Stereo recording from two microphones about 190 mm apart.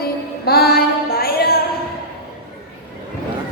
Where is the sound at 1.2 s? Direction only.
55° left (ahead or behind).